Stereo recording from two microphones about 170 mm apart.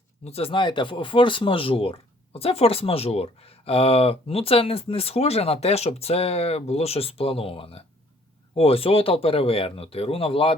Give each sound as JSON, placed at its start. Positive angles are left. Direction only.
{"t": 0.3, "sound": "speech", "side_deg": 35}